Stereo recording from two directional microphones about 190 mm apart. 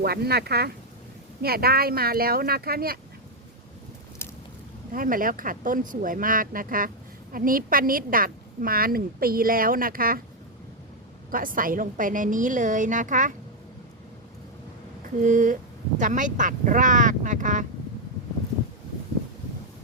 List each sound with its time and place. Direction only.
0.0 s a woman's voice: 55° right (ahead or behind)
4.9 s a woman's voice: 45° right (ahead or behind)
11.3 s a woman's voice: 45° right (ahead or behind)
15.2 s a woman's voice: 45° right (ahead or behind)